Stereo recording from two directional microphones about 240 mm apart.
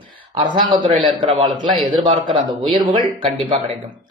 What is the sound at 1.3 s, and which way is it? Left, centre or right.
Speech, centre.